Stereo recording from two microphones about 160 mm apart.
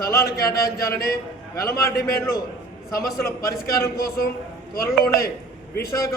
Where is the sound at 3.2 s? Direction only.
20° left (ahead or behind).